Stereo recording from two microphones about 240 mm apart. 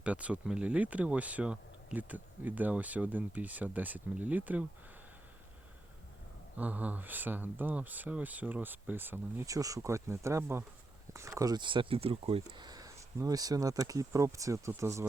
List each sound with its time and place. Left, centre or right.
0.0 s speech: centre
6.6 s speech: centre